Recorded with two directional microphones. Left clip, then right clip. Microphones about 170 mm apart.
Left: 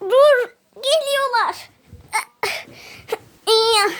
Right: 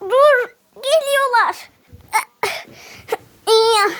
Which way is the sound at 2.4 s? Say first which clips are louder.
Right 2 dB; 5° right (ahead or behind).